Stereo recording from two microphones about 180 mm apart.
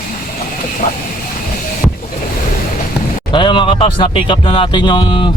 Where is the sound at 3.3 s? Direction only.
25° left (ahead or behind).